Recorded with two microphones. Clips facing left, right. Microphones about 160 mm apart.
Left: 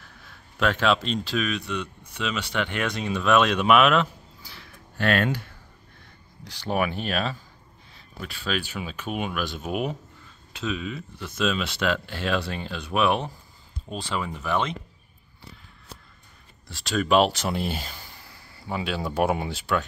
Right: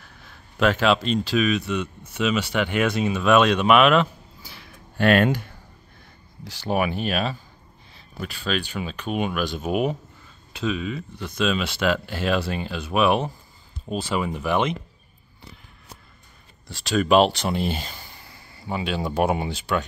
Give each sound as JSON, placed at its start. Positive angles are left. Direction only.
{"t": 0.2, "sound": "speech", "side_deg": 0}
{"t": 4.5, "sound": "a sound", "side_deg": -15}
{"t": 6.4, "sound": "speech", "side_deg": -5}
{"t": 16.6, "sound": "speech", "side_deg": 0}